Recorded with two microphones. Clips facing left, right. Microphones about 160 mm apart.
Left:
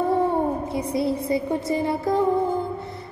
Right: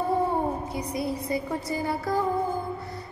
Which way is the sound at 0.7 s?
25° left (ahead or behind).